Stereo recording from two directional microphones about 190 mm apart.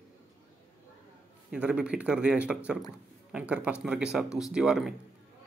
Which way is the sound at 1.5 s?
5° right (ahead or behind).